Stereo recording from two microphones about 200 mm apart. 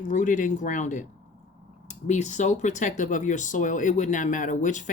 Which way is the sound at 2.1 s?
35° left (ahead or behind).